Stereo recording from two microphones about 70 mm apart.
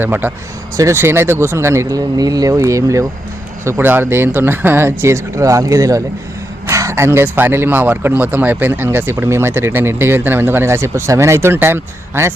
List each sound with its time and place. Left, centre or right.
0.0 s speech: right
3.6 s speech: right